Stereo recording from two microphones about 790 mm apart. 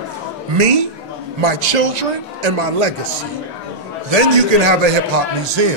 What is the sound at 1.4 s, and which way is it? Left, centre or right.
A man's voice, right.